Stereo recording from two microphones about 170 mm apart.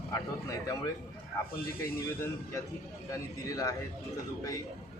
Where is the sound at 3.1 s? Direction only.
20° left (ahead or behind).